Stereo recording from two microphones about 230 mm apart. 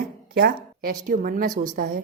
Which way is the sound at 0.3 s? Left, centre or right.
Right.